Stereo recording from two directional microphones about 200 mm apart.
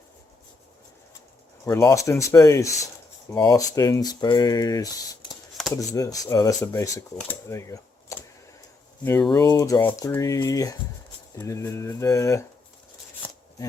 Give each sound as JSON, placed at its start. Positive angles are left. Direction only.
{"t": 1.6, "sound": "speech", "side_deg": 15}
{"t": 5.9, "sound": "speech", "side_deg": 15}
{"t": 9.3, "sound": "speech", "side_deg": 20}